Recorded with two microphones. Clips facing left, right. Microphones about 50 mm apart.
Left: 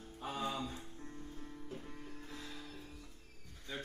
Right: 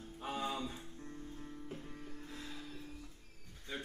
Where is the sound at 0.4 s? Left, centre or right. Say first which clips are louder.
Left 1 dB; centre.